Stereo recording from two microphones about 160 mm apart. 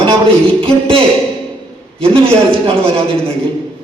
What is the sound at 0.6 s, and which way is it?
Speech, 35° right (ahead or behind).